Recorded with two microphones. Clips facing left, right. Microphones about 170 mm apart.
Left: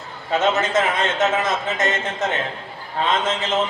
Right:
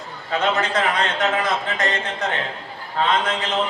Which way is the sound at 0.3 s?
25° left (ahead or behind).